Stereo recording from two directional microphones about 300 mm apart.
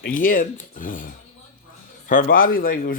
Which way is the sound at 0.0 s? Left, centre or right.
Left.